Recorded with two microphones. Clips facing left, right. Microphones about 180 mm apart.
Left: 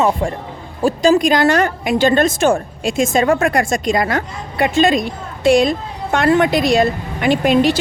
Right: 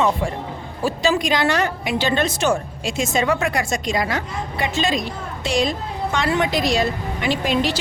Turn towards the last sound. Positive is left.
turn(degrees=55)  # may be behind; listen again after turning